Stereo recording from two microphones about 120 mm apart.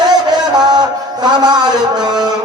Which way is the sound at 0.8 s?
35° right (ahead or behind).